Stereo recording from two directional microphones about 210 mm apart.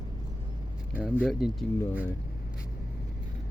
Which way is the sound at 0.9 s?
10° right (ahead or behind).